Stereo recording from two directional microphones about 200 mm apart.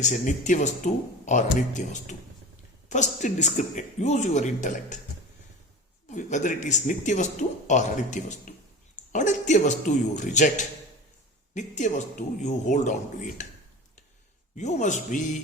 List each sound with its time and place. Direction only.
0.0 s speech: 40° left (ahead or behind)
6.1 s speech: 40° left (ahead or behind)
14.5 s speech: 35° left (ahead or behind)